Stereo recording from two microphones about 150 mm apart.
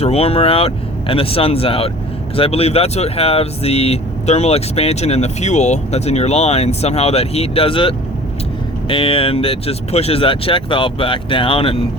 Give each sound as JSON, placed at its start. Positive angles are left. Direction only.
{"t": 0.0, "sound": "speech", "side_deg": 45}